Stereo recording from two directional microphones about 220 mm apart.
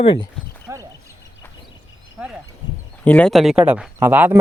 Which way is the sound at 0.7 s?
10° right (ahead or behind).